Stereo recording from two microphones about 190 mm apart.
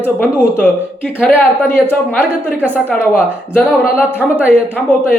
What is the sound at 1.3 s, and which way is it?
Speech, 10° right (ahead or behind).